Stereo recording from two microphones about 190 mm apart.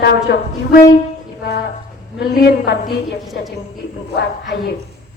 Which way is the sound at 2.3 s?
55° left (ahead or behind).